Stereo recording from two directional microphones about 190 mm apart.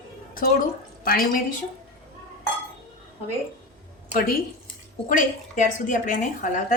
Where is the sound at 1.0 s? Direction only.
50° left (ahead or behind).